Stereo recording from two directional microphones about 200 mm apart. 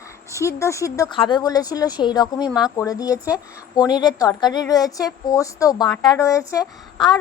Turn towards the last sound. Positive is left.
turn(degrees=20)  # may be behind; listen again after turning